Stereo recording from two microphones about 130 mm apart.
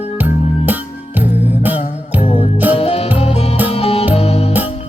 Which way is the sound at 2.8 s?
50° left (ahead or behind).